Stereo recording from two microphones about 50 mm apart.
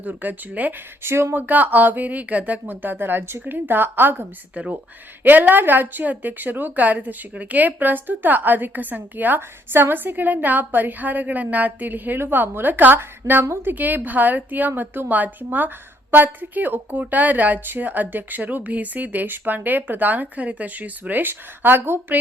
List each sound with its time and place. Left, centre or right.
0.0 s a woman's voice: right
1.0 s speech: right
1.4 s a woman's voice: right
3.4 s speech: right
4.5 s a woman's voice: right
12.2 s a woman's voice: right